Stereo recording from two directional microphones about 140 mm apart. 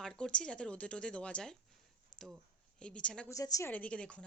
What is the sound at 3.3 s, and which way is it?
Speech, 25° left (ahead or behind).